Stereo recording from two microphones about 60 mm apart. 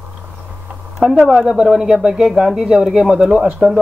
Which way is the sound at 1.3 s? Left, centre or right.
Centre.